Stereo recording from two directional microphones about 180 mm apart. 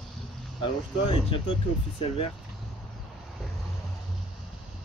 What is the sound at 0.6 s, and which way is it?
Cricket, 30° left (ahead or behind).